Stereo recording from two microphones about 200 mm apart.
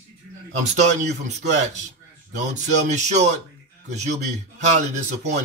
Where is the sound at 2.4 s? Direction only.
35° right (ahead or behind).